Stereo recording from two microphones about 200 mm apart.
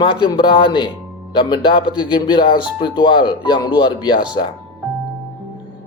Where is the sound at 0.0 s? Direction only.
25° left (ahead or behind).